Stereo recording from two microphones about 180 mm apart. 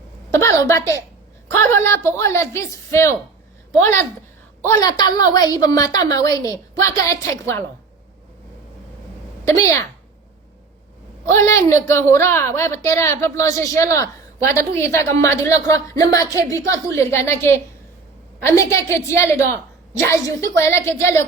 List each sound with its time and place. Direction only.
0.3 s a sound: 15° left (ahead or behind)
1.5 s a woman's voice: 15° left (ahead or behind)
4.7 s a woman's voice: 20° left (ahead or behind)
9.4 s a woman's voice: 15° left (ahead or behind)
11.3 s a woman's voice: 15° left (ahead or behind)